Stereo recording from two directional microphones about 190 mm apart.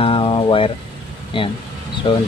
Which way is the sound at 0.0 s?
30° left (ahead or behind).